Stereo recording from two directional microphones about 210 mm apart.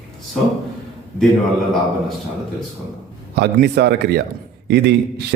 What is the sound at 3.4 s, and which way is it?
A man's voice, 50° right (ahead or behind).